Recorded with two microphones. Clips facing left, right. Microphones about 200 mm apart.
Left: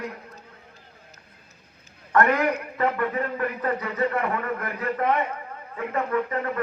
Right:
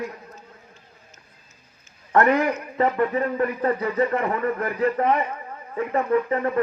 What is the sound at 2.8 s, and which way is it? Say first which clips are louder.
A man's voice: right 4 dB; 30° right (ahead or behind).